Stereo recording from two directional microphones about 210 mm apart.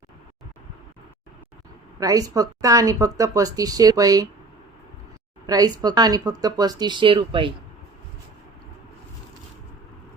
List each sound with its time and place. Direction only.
2.0 s speech: 15° right (ahead or behind)
5.5 s speech: 20° right (ahead or behind)